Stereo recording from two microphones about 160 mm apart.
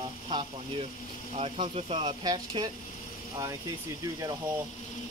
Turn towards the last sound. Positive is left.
turn(degrees=-20)  # may be behind; listen again after turning